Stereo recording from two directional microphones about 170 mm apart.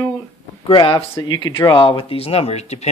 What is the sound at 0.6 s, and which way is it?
Speech, 30° left (ahead or behind).